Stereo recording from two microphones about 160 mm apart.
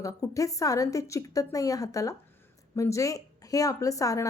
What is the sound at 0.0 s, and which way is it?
A woman's voice, 20° left (ahead or behind).